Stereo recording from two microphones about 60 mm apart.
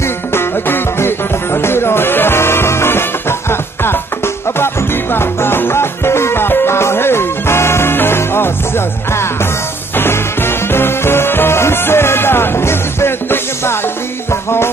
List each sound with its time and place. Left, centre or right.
0.3 s music: left
5.1 s music: left